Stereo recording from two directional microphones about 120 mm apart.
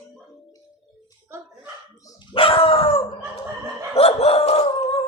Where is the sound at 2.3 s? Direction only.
50° left (ahead or behind).